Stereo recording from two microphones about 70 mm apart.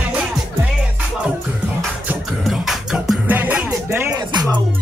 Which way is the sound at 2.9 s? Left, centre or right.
Centre.